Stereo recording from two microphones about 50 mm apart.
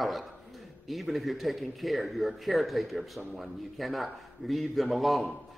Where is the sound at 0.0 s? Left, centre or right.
Centre.